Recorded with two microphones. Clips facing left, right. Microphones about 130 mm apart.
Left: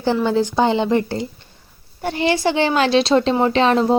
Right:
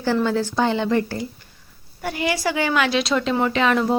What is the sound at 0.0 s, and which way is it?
A woman's voice, 20° left (ahead or behind).